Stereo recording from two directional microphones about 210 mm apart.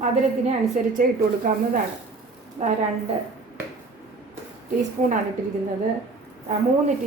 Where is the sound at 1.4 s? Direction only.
40° right (ahead or behind).